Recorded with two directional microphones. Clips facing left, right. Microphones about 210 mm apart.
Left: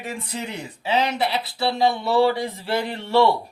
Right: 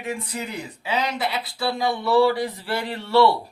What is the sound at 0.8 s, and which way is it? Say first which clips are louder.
Speech: left 3 dB; 30° left (ahead or behind).